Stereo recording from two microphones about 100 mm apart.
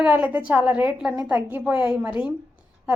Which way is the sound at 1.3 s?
20° right (ahead or behind).